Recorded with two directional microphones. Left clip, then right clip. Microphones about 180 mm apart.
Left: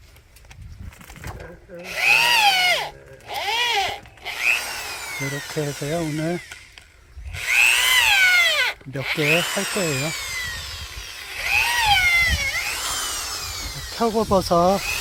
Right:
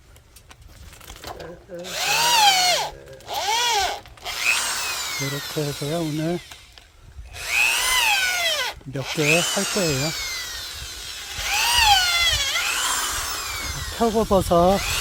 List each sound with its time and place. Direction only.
1.8 s drill: 15° right (ahead or behind); by 4.9 s 30° right (ahead or behind)
5.6 s speech: 10° left (ahead or behind)
7.3 s drill: 25° right (ahead or behind)
9.2 s speech: 40° right (ahead or behind)
9.8 s speech: centre (ahead or behind)
10.2 s a sound: 60° right (ahead or behind)
11.3 s dental drill: 45° right (ahead or behind); by 14.9 s 10° right (ahead or behind)